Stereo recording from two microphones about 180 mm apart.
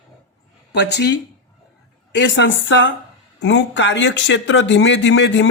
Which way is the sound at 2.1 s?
90° left.